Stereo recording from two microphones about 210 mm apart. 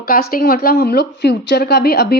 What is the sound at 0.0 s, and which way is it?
A woman's voice, 45° left (ahead or behind).